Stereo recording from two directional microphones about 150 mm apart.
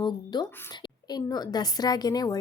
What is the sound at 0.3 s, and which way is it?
Speech, 25° left (ahead or behind).